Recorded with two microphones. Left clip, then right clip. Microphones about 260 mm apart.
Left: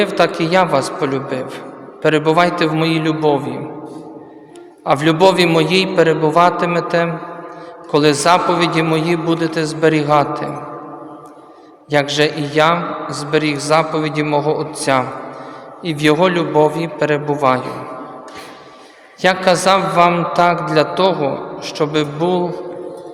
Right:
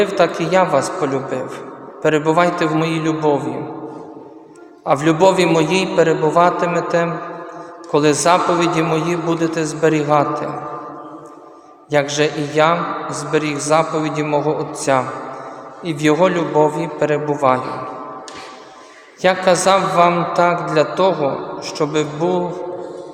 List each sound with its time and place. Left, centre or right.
0.2 s a man's voice: left
4.9 s a man's voice: left
11.9 s a man's voice: left
19.2 s a man's voice: left